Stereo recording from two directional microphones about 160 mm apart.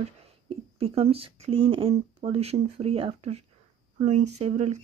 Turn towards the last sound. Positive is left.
turn(degrees=-45)  # may be behind; listen again after turning